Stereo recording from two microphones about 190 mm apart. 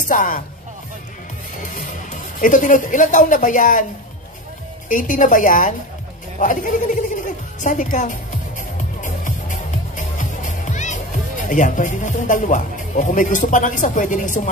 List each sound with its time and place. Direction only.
0.1 s speech: 45° left (ahead or behind)
2.4 s speech: 45° left (ahead or behind)
4.8 s speech: 45° left (ahead or behind)
6.4 s music: 45° left (ahead or behind)